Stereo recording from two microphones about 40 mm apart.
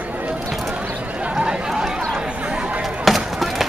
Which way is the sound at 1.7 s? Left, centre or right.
Centre.